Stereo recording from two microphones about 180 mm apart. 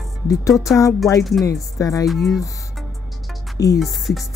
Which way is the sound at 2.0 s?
Centre (ahead or behind).